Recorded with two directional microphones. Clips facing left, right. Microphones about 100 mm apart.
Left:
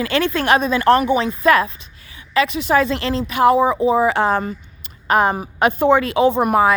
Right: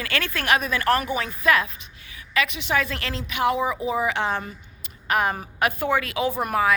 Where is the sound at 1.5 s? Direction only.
40° left (ahead or behind).